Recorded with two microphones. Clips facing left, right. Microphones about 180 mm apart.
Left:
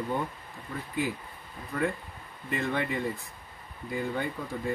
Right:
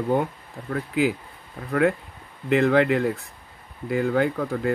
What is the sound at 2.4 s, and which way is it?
Speech, 80° right.